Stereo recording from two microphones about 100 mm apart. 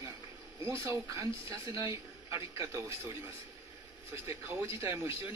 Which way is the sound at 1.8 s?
55° left (ahead or behind).